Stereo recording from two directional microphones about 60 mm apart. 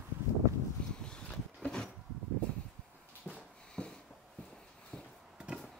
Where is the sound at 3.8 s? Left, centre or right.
Centre.